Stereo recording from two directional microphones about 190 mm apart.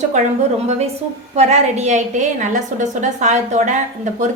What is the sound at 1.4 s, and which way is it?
A woman's voice, 35° right (ahead or behind).